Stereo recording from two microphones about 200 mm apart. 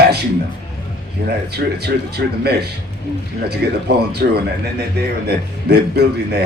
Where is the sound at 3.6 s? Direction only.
55° right (ahead or behind).